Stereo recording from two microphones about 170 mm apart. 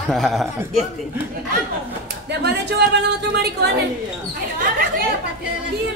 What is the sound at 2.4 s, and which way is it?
Speech, 75° right (ahead or behind).